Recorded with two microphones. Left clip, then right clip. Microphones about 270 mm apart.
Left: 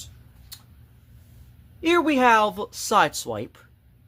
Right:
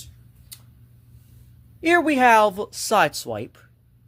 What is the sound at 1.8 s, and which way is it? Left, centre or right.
Speech, centre.